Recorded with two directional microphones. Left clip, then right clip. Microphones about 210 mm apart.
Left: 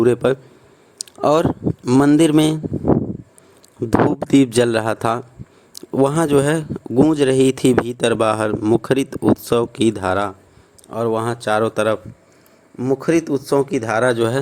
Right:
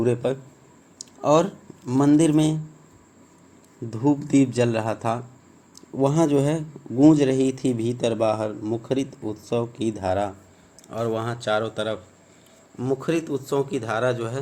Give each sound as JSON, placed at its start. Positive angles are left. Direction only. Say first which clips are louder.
{"t": 0.0, "sound": "a man's voice", "louder": "left 8 dB", "side_deg": 40}
{"t": 3.8, "sound": "speech", "louder": "left 7 dB", "side_deg": 45}
{"t": 12.7, "sound": "speech", "louder": "left 7 dB", "side_deg": 20}